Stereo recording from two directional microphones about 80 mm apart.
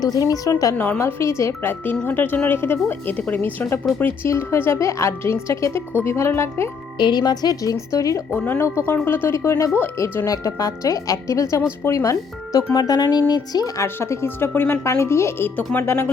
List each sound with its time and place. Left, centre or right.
0.0 s speech: left
0.8 s speech: left
2.0 s speech: left
4.0 s speech: left
7.0 s speech: left
8.4 s speech: left
11.9 s speech: left
13.8 s speech: left